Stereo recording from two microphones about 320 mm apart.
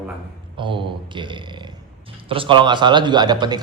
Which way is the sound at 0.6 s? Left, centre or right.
Centre.